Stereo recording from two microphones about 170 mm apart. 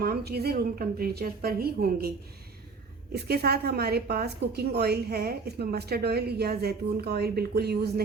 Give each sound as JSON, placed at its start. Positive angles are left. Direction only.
{"t": 0.0, "sound": "a woman's voice", "side_deg": -65}